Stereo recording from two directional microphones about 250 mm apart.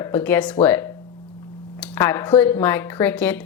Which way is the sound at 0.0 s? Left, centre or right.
Centre.